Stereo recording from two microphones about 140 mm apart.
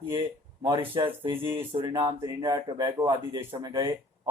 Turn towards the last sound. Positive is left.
turn(degrees=-25)  # may be behind; listen again after turning